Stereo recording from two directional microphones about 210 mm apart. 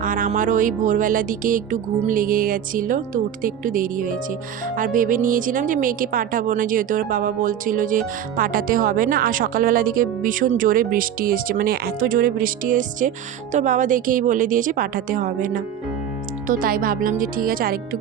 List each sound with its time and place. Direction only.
0.0 s speech: 40° right (ahead or behind)